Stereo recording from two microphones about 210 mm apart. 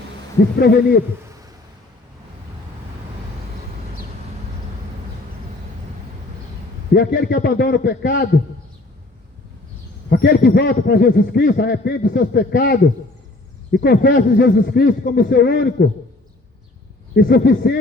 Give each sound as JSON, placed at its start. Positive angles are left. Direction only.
{"t": 0.6, "sound": "speech", "side_deg": 50}
{"t": 6.9, "sound": "speech", "side_deg": 45}
{"t": 10.1, "sound": "speech", "side_deg": 50}
{"t": 17.2, "sound": "speech", "side_deg": 55}
{"t": 17.4, "sound": "speech", "side_deg": 45}